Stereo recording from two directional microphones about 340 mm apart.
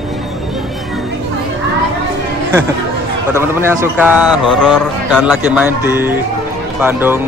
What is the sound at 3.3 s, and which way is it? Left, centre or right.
A man's voice, centre.